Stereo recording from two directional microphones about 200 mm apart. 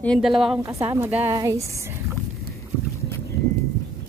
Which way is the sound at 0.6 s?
15° right (ahead or behind).